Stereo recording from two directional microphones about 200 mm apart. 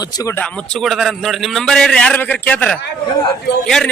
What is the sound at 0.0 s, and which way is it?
A man's voice, 15° left (ahead or behind).